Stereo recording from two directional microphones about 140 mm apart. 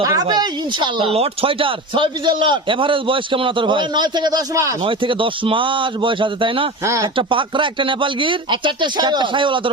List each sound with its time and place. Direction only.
0.0 s speech: 25° right (ahead or behind)
4.8 s speech: 40° right (ahead or behind)
6.8 s speech: 20° right (ahead or behind)
7.2 s speech: 35° right (ahead or behind)